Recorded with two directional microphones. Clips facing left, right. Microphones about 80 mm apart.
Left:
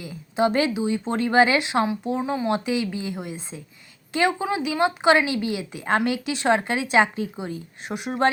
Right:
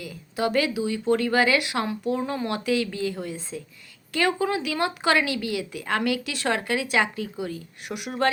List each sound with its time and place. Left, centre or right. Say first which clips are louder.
0.0 s a woman's voice: left 4 dB; left